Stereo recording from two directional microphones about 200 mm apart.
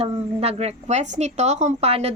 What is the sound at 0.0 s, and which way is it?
A woman's voice, 30° right (ahead or behind).